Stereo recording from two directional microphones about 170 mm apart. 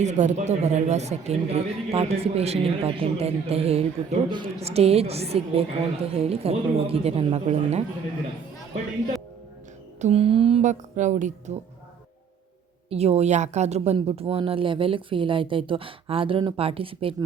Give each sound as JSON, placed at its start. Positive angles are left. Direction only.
{"t": 0.0, "sound": "speech", "side_deg": -45}
{"t": 10.0, "sound": "a woman's voice", "side_deg": -35}
{"t": 12.9, "sound": "speech", "side_deg": -40}